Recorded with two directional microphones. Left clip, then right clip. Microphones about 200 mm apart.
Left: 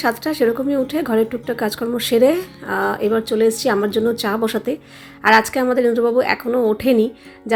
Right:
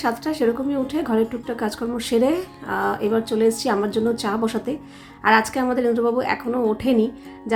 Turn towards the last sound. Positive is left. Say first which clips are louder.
# left 4 dB
turn(degrees=20)  # may be behind; listen again after turning